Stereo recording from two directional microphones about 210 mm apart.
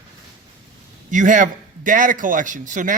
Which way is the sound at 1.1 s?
35° right (ahead or behind).